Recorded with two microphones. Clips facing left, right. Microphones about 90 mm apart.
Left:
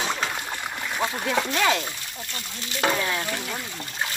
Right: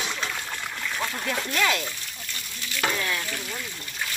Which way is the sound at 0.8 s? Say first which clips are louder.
Left 3 dB; 20° left (ahead or behind).